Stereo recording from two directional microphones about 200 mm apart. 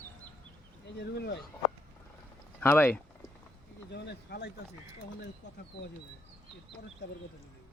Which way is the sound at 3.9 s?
55° left (ahead or behind).